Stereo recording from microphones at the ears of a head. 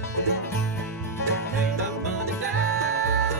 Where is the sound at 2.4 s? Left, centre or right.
Right.